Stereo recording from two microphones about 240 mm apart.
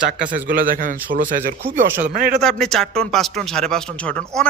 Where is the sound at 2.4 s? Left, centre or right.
Centre.